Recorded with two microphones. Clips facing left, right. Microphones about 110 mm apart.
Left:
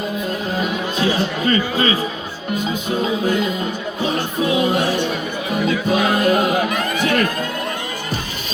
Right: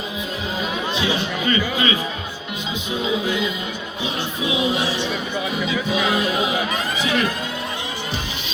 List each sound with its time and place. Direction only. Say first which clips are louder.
0.9 s a man's voice: left 5 dB; 40° left (ahead or behind)